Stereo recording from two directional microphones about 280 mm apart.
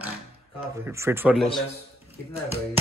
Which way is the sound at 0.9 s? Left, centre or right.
Centre.